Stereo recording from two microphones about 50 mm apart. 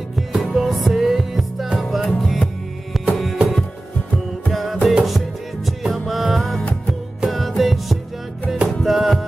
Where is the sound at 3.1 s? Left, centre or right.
Centre.